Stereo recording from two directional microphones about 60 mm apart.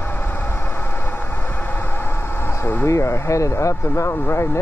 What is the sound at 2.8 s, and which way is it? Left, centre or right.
Speech, left.